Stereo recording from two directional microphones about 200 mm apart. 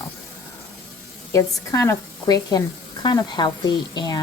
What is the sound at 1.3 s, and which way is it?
Speech, 15° left (ahead or behind).